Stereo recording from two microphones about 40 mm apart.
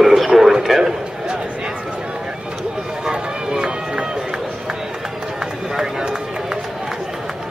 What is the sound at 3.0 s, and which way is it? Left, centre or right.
Run, centre.